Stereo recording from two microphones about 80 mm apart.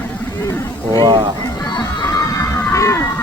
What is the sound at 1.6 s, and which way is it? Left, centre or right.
Music, left.